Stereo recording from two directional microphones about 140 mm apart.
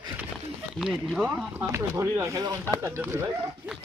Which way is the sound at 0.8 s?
5° right (ahead or behind).